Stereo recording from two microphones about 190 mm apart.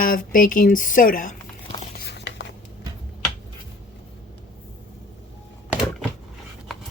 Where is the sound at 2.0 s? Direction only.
60° left (ahead or behind).